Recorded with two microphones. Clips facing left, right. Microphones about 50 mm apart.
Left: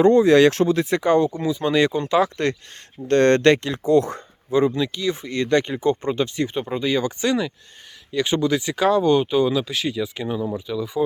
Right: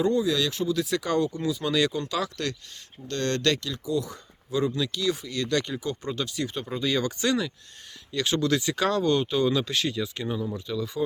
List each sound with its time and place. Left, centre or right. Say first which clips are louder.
0.0 s speech: left 11 dB; left
0.7 s speech: left 7 dB; left
3.8 s speech: left 12 dB; left
4.6 s speech: left 5 dB; left
9.5 s speech: left 3 dB; centre